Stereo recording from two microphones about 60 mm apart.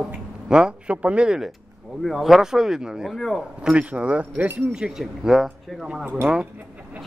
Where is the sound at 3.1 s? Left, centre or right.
Centre.